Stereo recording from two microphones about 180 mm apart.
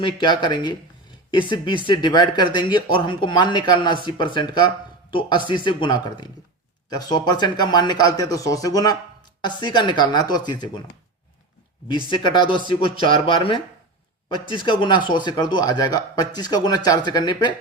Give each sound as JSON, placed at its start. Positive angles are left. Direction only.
{"t": 0.0, "sound": "speech", "side_deg": 25}
{"t": 12.1, "sound": "speech", "side_deg": 25}